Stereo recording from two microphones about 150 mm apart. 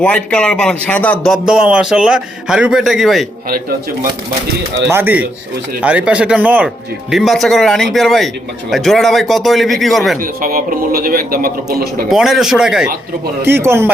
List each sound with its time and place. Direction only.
0.0 s a man's voice: 5° left (ahead or behind)
4.9 s a man's voice: 15° right (ahead or behind)
10.2 s a man's voice: 70° right (ahead or behind)
12.0 s a man's voice: centre (ahead or behind)
13.4 s speech: 15° right (ahead or behind)